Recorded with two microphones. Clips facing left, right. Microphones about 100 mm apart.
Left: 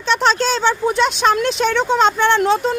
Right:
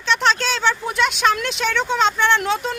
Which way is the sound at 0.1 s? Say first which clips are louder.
Left 3 dB; 35° left (ahead or behind).